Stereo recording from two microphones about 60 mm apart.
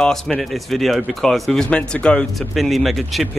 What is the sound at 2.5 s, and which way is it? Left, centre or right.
Speech, centre.